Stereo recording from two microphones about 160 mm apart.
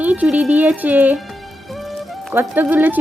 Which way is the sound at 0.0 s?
10° right (ahead or behind).